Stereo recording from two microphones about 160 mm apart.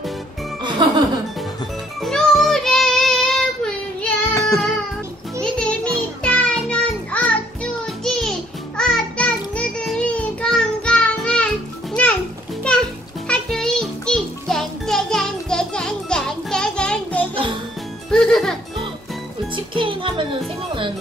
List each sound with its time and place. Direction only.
0.7 s music: 30° right (ahead or behind)
2.0 s child singing: 5° left (ahead or behind)
4.3 s child singing: 20° left (ahead or behind)
5.4 s child singing: 5° left (ahead or behind)
7.8 s music: centre (ahead or behind)
13.3 s music: 5° left (ahead or behind)
19.5 s music: 30° right (ahead or behind)